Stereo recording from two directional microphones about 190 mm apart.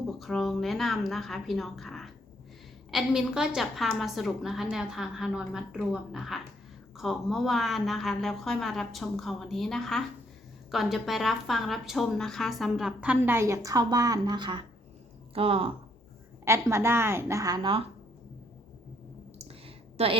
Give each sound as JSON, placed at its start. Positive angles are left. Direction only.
{"t": 0.2, "sound": "a woman's voice", "side_deg": 0}
{"t": 16.5, "sound": "a woman's voice", "side_deg": -15}
{"t": 19.4, "sound": "a sound", "side_deg": -30}